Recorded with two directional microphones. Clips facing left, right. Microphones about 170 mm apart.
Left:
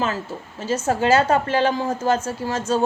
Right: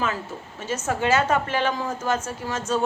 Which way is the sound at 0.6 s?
30° left (ahead or behind).